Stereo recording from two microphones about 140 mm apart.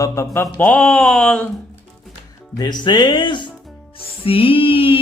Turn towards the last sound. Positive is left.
turn(degrees=40)  # may be behind; listen again after turning